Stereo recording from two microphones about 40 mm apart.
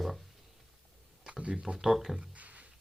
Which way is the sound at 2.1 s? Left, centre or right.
Right.